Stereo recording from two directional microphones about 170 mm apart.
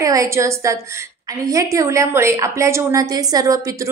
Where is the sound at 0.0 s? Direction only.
20° right (ahead or behind).